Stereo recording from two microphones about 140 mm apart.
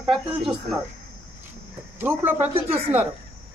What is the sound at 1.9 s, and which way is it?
Speech, 15° right (ahead or behind).